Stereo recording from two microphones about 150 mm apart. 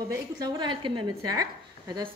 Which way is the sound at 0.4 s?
30° right (ahead or behind).